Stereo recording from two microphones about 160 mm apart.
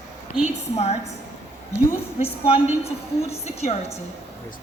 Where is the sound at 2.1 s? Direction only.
35° left (ahead or behind).